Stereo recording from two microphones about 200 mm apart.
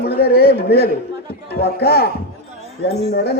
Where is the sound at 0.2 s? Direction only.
50° left (ahead or behind).